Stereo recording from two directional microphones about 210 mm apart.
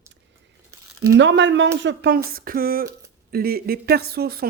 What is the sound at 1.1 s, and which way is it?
Speech, 60° right (ahead or behind).